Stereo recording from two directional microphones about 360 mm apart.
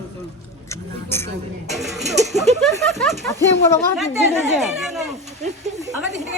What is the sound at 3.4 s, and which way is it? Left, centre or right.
Speech, centre.